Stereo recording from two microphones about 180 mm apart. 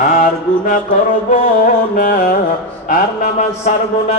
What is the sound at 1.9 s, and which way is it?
Music, 50° left (ahead or behind).